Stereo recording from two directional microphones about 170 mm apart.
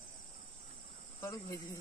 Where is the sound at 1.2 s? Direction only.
20° left (ahead or behind).